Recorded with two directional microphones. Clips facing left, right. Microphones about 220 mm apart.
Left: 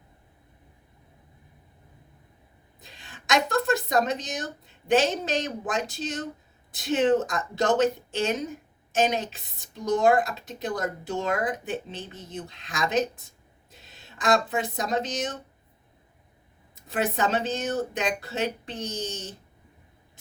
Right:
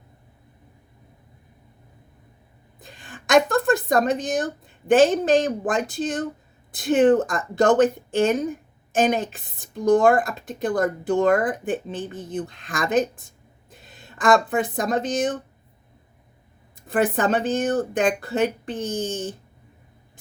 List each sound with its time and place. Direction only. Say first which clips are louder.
2.7 s a woman's voice: right 7 dB; 50° right (ahead or behind)
16.7 s a woman's voice: right 6 dB; 50° right (ahead or behind)